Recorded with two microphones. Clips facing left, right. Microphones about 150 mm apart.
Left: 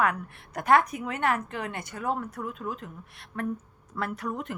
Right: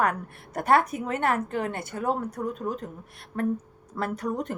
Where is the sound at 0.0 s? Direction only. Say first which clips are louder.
Right 1 dB; 45° right (ahead or behind).